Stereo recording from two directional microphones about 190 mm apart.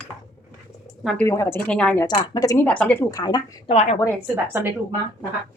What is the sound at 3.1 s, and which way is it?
Speech, 20° left (ahead or behind).